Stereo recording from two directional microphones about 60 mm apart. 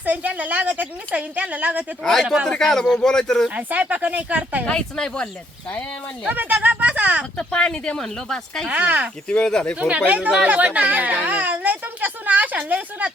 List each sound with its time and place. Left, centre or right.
0.0 s speech: right
2.5 s speech: centre
3.6 s speech: right
4.6 s speech: centre
6.2 s speech: right
7.3 s speech: centre
8.7 s speech: right
9.3 s speech: centre
10.1 s speech: right